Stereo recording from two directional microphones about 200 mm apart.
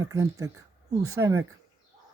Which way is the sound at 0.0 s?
15° right (ahead or behind).